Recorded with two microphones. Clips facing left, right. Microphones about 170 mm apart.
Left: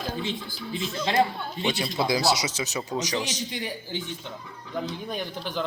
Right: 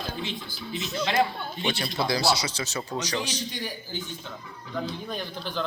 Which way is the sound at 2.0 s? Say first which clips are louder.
Left 1 dB; 20° left (ahead or behind).